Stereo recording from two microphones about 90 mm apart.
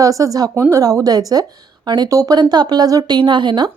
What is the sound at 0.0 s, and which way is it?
Speech, 40° right (ahead or behind).